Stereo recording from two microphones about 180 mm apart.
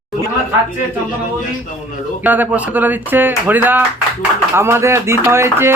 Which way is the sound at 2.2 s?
10° right (ahead or behind).